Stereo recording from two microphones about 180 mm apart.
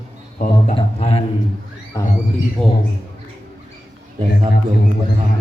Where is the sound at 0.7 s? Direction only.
35° left (ahead or behind).